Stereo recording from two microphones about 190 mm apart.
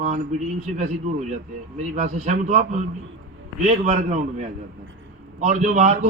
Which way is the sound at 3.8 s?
40° right (ahead or behind).